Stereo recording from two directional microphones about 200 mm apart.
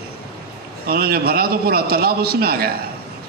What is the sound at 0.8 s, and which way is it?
A man's voice, 50° right (ahead or behind).